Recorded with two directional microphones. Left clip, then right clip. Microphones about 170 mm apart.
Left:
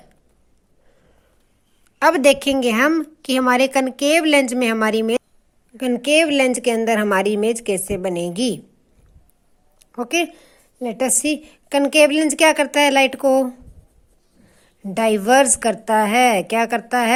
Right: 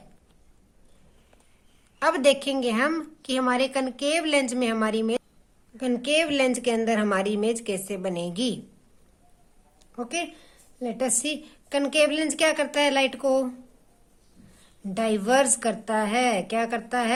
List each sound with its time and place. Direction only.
2.0 s a woman's voice: 40° left (ahead or behind)
9.9 s a woman's voice: 45° left (ahead or behind)